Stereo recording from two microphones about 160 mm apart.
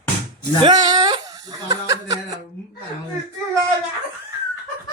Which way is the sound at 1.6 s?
25° right (ahead or behind).